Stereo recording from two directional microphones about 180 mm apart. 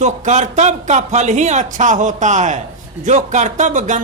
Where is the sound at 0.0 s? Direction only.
40° right (ahead or behind).